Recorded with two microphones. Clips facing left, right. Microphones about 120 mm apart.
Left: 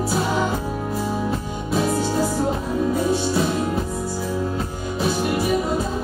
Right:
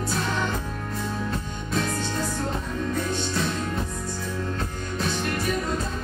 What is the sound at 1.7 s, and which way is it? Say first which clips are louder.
Music: left 7 dB; 5° left (ahead or behind).